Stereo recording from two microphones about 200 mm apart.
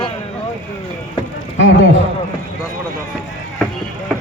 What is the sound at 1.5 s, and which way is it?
Speech, 65° left (ahead or behind).